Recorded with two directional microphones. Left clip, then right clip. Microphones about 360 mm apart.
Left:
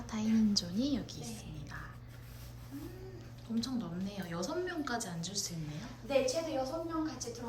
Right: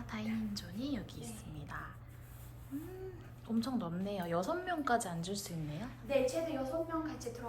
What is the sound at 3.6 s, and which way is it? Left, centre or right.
Speech, centre.